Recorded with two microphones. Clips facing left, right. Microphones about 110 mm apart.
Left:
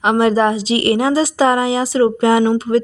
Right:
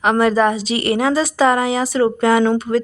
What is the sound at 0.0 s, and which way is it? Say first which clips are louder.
Speech: left 1 dB; 25° left (ahead or behind).